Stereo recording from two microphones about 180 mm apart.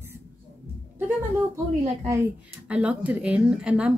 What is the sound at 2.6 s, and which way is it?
Speech, 5° right (ahead or behind).